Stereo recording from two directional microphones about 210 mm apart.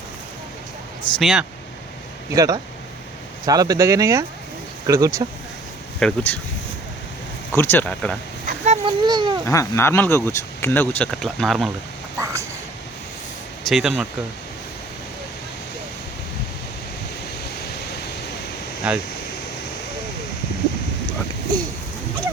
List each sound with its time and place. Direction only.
1.2 s speech: 5° right (ahead or behind)
2.3 s speech: 15° right (ahead or behind)
6.0 s speech: 5° left (ahead or behind)
7.5 s speech: 10° left (ahead or behind)
8.4 s speech: 35° right (ahead or behind)
9.5 s speech: 15° left (ahead or behind)
12.2 s a sound: 15° right (ahead or behind)
13.7 s speech: centre (ahead or behind)
18.8 s speech: 5° right (ahead or behind)